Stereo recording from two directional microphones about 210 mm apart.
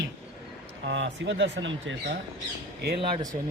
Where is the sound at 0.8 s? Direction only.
55° right (ahead or behind).